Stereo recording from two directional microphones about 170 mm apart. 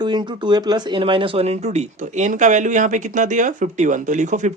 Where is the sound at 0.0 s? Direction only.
25° right (ahead or behind).